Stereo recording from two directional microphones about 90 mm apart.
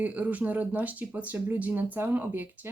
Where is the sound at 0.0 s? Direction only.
15° right (ahead or behind).